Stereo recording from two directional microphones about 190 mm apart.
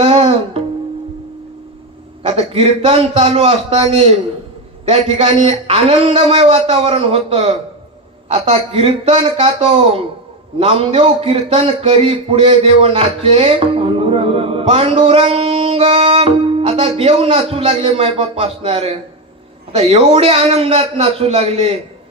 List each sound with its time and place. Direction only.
0.0 s music: 30° right (ahead or behind)
2.2 s a man's voice: 30° right (ahead or behind)